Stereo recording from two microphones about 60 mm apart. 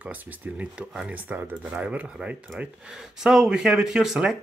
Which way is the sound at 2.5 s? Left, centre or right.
Centre.